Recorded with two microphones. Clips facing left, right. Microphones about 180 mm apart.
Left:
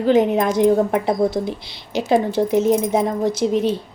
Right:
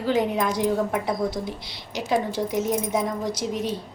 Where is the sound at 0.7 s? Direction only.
35° left (ahead or behind).